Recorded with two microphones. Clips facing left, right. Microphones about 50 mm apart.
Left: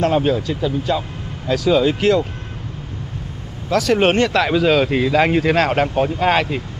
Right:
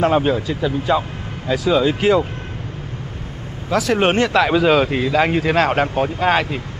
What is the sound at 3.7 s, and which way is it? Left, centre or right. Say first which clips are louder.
Speech: left 1 dB; centre.